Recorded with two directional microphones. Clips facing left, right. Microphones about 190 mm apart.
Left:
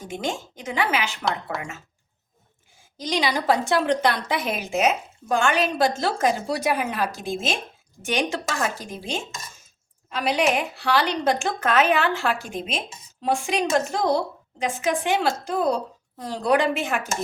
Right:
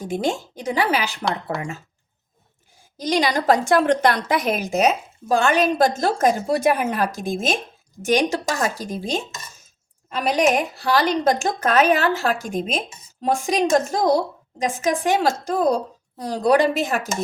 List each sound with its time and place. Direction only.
0.1 s a woman's voice: 35° right (ahead or behind)
3.0 s a woman's voice: 45° right (ahead or behind)